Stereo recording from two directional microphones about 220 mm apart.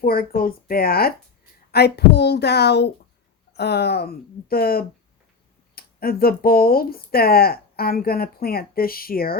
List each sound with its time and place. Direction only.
0.0 s speech: 40° left (ahead or behind)